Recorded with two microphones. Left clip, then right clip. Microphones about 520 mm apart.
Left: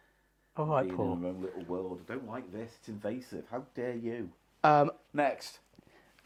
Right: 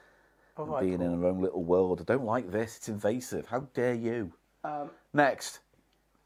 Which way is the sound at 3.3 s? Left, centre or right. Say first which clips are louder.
Right 7 dB; right.